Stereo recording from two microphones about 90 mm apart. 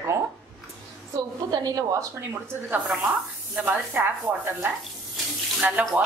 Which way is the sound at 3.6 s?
20° right (ahead or behind).